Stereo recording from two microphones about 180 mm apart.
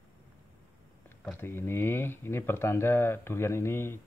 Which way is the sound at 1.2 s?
10° left (ahead or behind).